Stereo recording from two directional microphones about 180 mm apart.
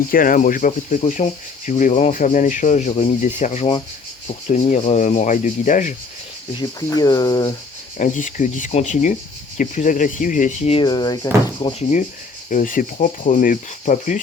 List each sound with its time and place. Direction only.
0.1 s speech: 50° left (ahead or behind)
6.6 s speech: 20° left (ahead or behind)
7.9 s speech: 45° left (ahead or behind); by 11.3 s 25° left (ahead or behind)
11.6 s speech: 40° left (ahead or behind)